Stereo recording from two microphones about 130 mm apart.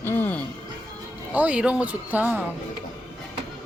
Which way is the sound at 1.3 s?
10° right (ahead or behind).